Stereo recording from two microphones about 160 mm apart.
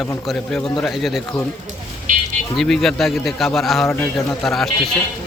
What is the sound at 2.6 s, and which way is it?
Speech, centre (ahead or behind).